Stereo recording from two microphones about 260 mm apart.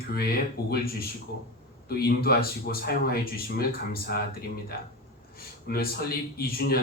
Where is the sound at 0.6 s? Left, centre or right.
Left.